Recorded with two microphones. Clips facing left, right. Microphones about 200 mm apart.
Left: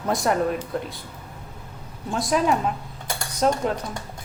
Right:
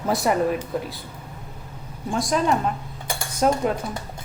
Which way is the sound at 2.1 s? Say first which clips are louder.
Even; centre (ahead or behind).